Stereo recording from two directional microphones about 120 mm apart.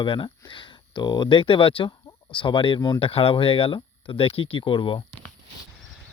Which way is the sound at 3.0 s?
50° left (ahead or behind).